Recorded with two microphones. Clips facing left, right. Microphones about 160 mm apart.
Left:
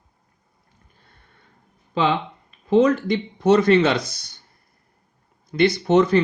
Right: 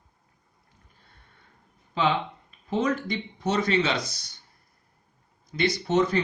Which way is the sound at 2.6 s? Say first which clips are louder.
Left 9 dB; 75° left (ahead or behind).